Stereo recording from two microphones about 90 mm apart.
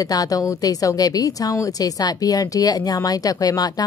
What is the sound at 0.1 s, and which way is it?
Speech, 40° left (ahead or behind).